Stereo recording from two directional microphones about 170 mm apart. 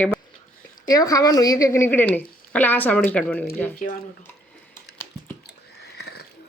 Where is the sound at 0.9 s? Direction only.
20° left (ahead or behind).